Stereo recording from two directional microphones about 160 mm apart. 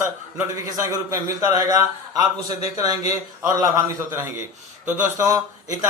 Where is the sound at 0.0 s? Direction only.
15° right (ahead or behind).